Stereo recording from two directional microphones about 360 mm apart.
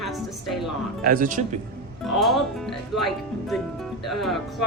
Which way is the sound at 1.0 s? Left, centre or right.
Right.